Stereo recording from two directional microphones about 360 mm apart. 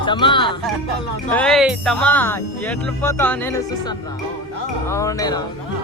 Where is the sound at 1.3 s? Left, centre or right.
Centre.